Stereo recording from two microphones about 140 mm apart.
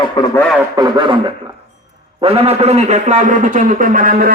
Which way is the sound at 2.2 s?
45° right (ahead or behind).